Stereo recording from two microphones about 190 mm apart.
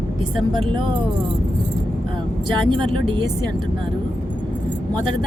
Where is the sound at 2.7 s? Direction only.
25° right (ahead or behind).